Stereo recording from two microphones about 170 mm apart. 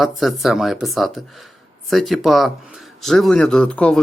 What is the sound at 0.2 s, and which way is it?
Speech, centre (ahead or behind).